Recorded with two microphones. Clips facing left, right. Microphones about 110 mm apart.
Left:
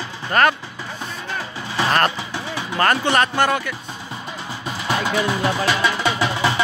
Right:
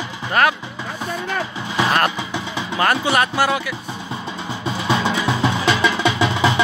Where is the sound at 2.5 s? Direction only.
10° right (ahead or behind).